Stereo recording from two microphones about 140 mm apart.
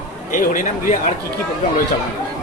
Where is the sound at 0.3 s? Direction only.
70° left (ahead or behind).